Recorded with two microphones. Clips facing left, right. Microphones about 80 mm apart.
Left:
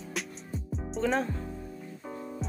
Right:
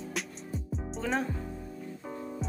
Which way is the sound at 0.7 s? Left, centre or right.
Centre.